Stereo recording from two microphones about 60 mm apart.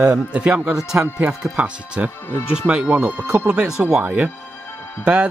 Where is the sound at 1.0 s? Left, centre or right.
Right.